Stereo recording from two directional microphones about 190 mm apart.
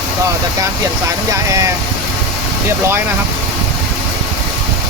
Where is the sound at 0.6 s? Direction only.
15° right (ahead or behind).